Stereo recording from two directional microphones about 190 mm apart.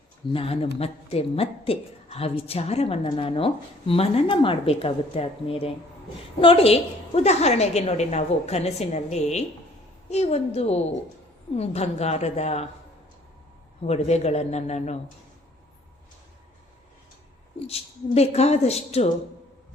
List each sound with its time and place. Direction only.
0.3 s a woman's voice: 30° left (ahead or behind)
13.8 s a woman's voice: 35° left (ahead or behind)
17.7 s a woman's voice: 30° left (ahead or behind)